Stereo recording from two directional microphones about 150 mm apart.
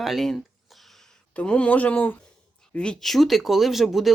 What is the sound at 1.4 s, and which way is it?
Speech, 10° left (ahead or behind).